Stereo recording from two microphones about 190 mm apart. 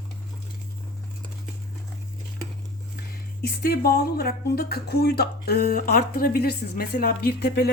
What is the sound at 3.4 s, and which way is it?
Speech, 55° left (ahead or behind).